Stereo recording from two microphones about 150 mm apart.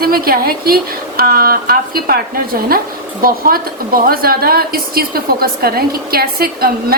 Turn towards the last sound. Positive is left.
turn(degrees=-85)